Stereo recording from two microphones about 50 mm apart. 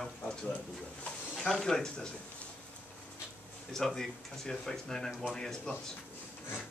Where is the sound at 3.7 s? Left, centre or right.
Centre.